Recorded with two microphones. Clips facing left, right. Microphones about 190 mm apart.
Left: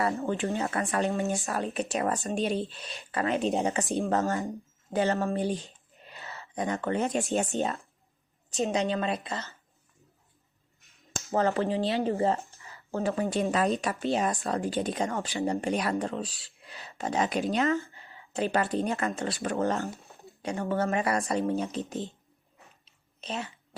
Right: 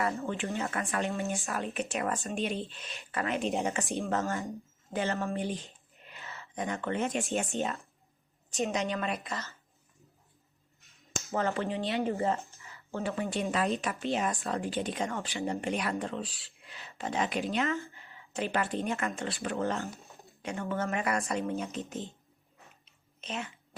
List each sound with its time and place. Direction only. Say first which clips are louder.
0.2 s speech: left 4 dB; 35° left (ahead or behind)
11.3 s speech: left 5 dB; 35° left (ahead or behind)
22.9 s a sound: left 3 dB; 35° left (ahead or behind)